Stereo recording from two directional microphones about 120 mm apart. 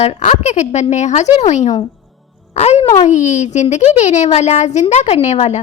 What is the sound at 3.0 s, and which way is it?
A woman's voice, 85° left.